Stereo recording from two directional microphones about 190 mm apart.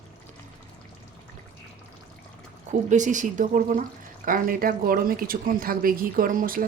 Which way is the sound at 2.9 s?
40° right (ahead or behind).